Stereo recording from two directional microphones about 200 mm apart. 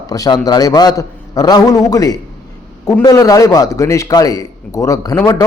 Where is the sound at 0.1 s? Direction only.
20° left (ahead or behind).